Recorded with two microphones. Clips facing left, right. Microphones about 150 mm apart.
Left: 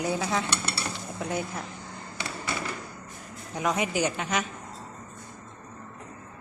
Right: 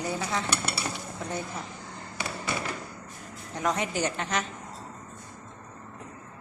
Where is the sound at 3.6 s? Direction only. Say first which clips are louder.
Left 2 dB; 10° left (ahead or behind).